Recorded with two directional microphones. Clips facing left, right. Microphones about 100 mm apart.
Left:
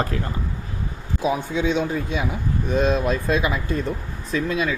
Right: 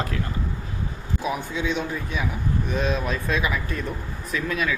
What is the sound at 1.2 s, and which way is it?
Speech, 25° left (ahead or behind).